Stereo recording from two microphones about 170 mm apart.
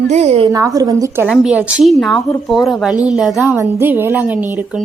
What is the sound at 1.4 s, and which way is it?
A woman's voice, 5° right (ahead or behind).